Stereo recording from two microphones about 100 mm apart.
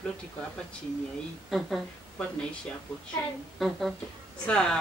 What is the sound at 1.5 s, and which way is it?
Speech, 5° left (ahead or behind).